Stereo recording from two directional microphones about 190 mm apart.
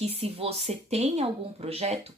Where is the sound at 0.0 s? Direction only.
30° right (ahead or behind).